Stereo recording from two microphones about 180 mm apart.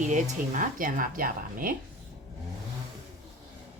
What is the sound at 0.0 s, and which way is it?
A woman's voice, 45° right (ahead or behind).